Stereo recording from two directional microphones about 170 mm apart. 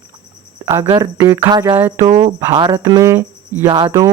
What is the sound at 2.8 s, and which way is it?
Cricket, 20° right (ahead or behind).